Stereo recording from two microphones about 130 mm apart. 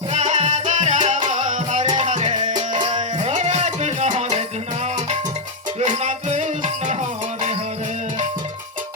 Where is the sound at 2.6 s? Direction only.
35° right (ahead or behind).